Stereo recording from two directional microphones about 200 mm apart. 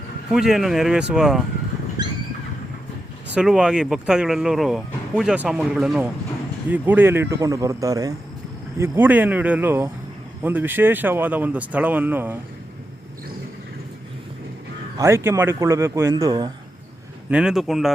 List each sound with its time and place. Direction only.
0.3 s speech: centre (ahead or behind)
2.0 s a sound: 20° right (ahead or behind)
3.3 s speech: 5° right (ahead or behind)
14.9 s speech: 15° right (ahead or behind)
17.2 s speech: 5° right (ahead or behind)